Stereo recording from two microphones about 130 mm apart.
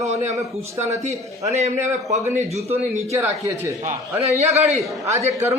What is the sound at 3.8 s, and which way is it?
Speech, 65° right (ahead or behind).